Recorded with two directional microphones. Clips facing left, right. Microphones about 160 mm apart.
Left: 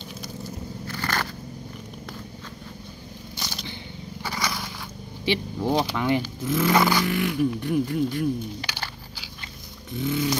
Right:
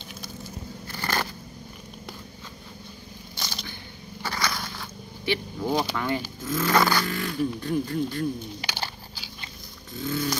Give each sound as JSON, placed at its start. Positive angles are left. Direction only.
{"t": 0.9, "sound": "scissors", "side_deg": -15}
{"t": 4.2, "sound": "a sound", "side_deg": 10}
{"t": 5.9, "sound": "speech", "side_deg": 20}
{"t": 9.9, "sound": "speech", "side_deg": 15}